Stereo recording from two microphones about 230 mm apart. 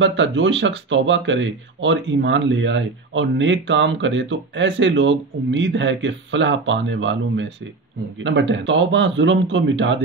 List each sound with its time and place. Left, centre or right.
0.0 s speech: right